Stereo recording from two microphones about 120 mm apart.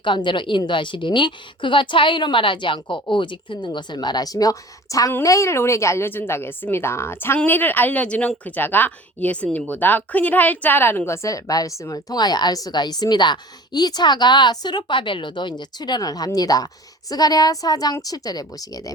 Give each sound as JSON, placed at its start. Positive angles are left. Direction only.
{"t": 0.0, "sound": "a woman's voice", "side_deg": 40}